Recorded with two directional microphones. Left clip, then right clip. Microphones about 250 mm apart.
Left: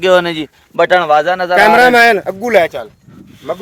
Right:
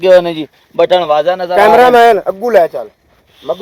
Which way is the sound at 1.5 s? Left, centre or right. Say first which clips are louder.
Right 2 dB; left.